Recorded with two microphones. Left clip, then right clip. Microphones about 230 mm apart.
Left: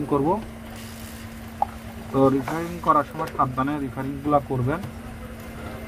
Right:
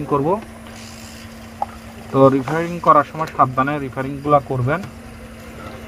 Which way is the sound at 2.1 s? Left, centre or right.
Right.